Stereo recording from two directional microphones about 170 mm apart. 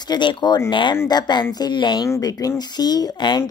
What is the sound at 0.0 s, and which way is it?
A woman's voice, 25° left (ahead or behind).